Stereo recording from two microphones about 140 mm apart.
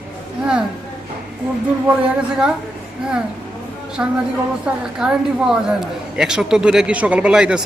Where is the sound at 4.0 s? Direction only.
15° right (ahead or behind).